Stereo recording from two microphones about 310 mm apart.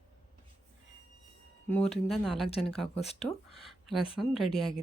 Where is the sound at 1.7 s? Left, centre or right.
Centre.